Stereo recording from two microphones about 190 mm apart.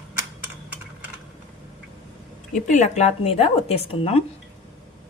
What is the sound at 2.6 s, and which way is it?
Speech, 40° left (ahead or behind).